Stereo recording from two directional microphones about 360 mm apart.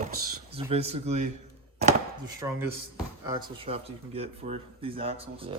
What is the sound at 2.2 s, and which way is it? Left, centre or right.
Speech, centre.